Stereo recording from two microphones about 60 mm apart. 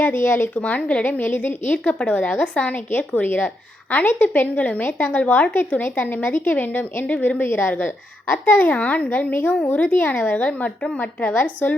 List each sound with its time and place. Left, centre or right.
0.0 s a woman's voice: left
0.6 s a woman's voice: left
1.0 s a woman's voice: left
1.8 s a woman's voice: centre